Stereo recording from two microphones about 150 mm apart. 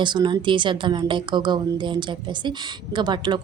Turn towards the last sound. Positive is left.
turn(degrees=-30)  # may be behind; listen again after turning